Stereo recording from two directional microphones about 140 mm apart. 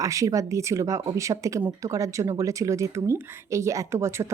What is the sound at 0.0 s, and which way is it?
Speech, 25° right (ahead or behind).